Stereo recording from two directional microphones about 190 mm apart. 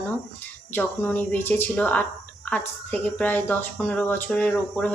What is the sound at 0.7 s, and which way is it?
Speech, 10° left (ahead or behind).